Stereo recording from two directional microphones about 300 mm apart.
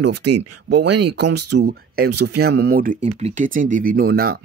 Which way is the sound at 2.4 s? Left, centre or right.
Right.